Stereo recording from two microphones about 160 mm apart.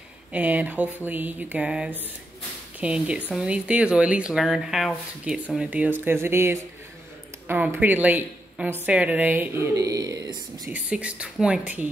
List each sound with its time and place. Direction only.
0.3 s speech: 10° right (ahead or behind)
10.7 s speech: 10° right (ahead or behind)